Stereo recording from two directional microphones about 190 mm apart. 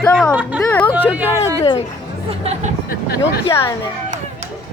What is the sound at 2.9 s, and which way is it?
Speech, 55° left (ahead or behind).